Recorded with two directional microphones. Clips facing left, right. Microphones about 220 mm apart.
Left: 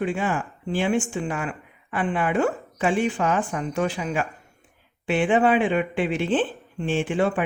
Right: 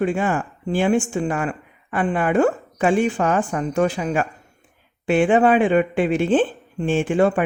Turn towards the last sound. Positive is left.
turn(degrees=-45)  # may be behind; listen again after turning